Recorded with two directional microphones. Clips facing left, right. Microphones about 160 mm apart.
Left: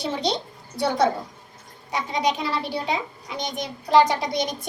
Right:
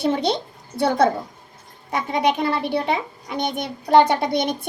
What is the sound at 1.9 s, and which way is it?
A child's voice, 55° right (ahead or behind).